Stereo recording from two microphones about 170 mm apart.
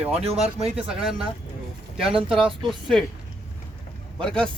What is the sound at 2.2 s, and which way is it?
Speech, centre (ahead or behind).